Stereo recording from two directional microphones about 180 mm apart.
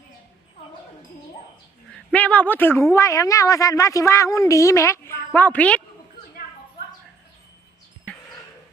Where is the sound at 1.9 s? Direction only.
10° left (ahead or behind).